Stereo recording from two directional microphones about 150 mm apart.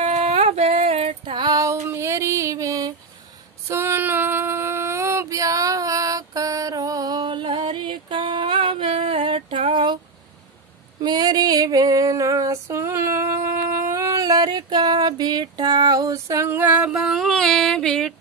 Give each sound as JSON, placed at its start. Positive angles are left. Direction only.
{"t": 0.0, "sound": "a sound", "side_deg": -45}
{"t": 3.6, "sound": "female singing", "side_deg": -15}
{"t": 11.0, "sound": "female singing", "side_deg": -25}